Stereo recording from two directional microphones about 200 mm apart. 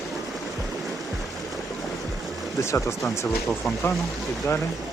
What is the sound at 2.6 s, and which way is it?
Speech, 15° left (ahead or behind).